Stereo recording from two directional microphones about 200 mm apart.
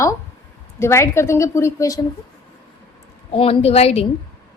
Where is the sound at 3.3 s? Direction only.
30° left (ahead or behind).